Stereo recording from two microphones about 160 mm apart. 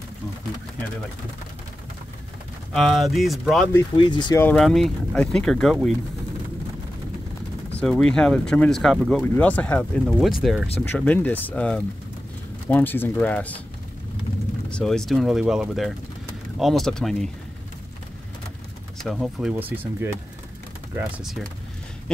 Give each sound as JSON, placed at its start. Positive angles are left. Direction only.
{"t": 2.7, "sound": "speech", "side_deg": 0}
{"t": 3.9, "sound": "speech", "side_deg": 30}
{"t": 4.6, "sound": "speech", "side_deg": 0}
{"t": 7.7, "sound": "speech", "side_deg": 5}
{"t": 10.8, "sound": "speech", "side_deg": 10}
{"t": 14.7, "sound": "speech", "side_deg": 5}
{"t": 18.9, "sound": "speech", "side_deg": 0}
{"t": 21.2, "sound": "speech", "side_deg": 0}